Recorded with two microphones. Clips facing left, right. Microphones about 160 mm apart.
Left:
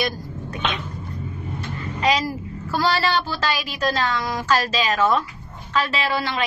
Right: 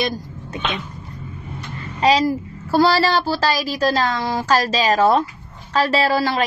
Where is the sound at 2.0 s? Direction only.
35° right (ahead or behind).